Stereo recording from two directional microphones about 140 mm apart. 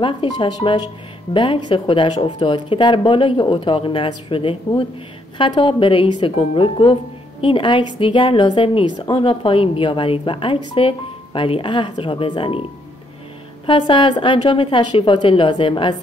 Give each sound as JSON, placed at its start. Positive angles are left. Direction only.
{"t": 0.0, "sound": "speech", "side_deg": 35}
{"t": 13.7, "sound": "speech", "side_deg": 35}